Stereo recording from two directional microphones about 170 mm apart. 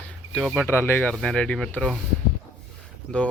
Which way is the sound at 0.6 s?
10° left (ahead or behind).